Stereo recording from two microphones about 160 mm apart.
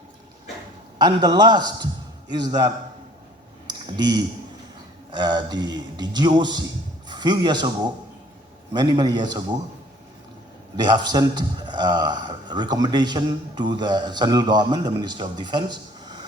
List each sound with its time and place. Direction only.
0.9 s a man's voice: 25° right (ahead or behind)
3.9 s a man's voice: 25° right (ahead or behind)
8.7 s a man's voice: 25° right (ahead or behind)
10.8 s a man's voice: 25° right (ahead or behind)